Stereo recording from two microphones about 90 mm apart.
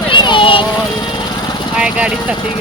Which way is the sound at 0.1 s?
60° left (ahead or behind).